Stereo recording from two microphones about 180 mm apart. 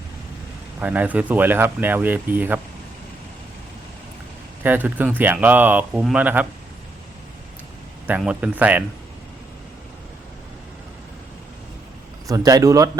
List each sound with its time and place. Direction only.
0.8 s speech: 10° right (ahead or behind)
4.6 s speech: 10° right (ahead or behind)
8.0 s speech: 10° right (ahead or behind)
12.3 s speech: 20° right (ahead or behind)